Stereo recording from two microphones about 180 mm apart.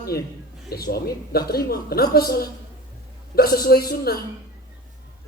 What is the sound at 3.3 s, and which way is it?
Speech, 60° left (ahead or behind).